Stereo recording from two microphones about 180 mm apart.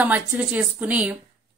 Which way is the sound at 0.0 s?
10° right (ahead or behind).